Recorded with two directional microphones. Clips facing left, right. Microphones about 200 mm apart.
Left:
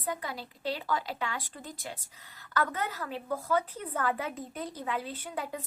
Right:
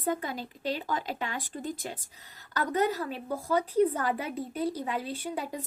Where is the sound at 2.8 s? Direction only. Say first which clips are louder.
Right 8 dB; 40° right (ahead or behind).